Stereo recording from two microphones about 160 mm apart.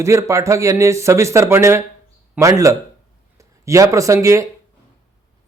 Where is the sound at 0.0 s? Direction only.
20° right (ahead or behind).